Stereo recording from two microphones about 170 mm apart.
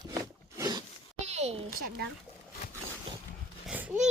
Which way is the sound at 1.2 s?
40° right (ahead or behind).